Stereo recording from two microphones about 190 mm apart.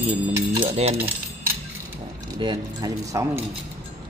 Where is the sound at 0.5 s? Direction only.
30° right (ahead or behind).